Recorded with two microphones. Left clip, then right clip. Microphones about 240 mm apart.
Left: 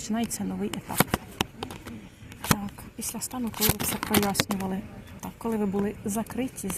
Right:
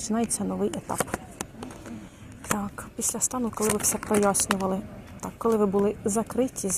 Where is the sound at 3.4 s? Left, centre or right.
Left.